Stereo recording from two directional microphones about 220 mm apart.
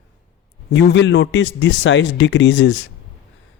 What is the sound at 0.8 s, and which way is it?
A man's voice, 55° left (ahead or behind).